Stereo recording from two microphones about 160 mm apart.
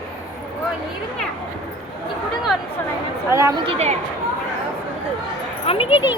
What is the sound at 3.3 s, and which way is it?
Speech, 20° right (ahead or behind).